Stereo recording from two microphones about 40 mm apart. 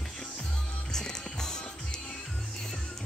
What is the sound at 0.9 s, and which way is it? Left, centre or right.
Music, centre.